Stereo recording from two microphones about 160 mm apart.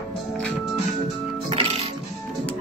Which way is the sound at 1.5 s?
35° right (ahead or behind).